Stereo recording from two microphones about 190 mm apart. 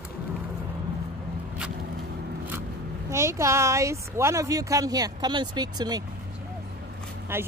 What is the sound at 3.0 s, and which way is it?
Speech, 15° right (ahead or behind).